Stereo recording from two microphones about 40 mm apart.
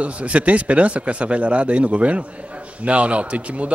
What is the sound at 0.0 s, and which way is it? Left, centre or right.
A man's voice, right.